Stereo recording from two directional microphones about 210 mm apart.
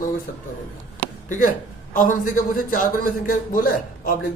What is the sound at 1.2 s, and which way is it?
A man's voice, 40° left (ahead or behind).